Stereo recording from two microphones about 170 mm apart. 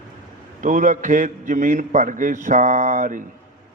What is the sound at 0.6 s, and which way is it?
A man's voice, 50° right (ahead or behind).